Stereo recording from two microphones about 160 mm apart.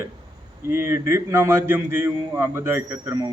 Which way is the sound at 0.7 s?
15° right (ahead or behind).